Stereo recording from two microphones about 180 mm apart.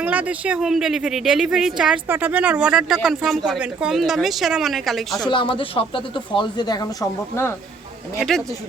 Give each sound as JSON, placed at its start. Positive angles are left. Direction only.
{"t": 0.0, "sound": "speech", "side_deg": -10}
{"t": 5.2, "sound": "speech", "side_deg": 25}